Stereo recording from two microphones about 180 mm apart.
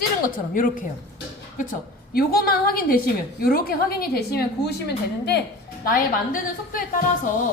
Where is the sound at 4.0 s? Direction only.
60° left (ahead or behind).